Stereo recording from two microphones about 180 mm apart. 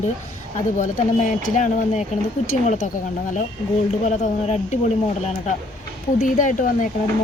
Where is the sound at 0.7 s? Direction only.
45° left (ahead or behind).